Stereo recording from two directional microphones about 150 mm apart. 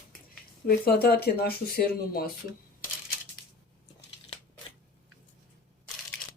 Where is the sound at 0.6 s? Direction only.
90° left.